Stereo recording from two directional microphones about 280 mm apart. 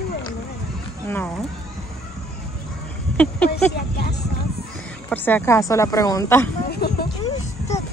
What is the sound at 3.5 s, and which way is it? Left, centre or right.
Speech, left.